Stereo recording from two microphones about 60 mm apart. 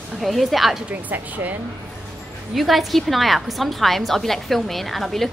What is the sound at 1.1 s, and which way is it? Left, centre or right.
Speech, right.